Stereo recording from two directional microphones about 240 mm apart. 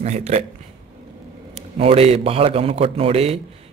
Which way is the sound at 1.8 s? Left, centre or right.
Right.